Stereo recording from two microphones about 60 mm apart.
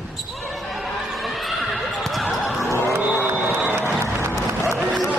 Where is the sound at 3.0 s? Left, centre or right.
Right.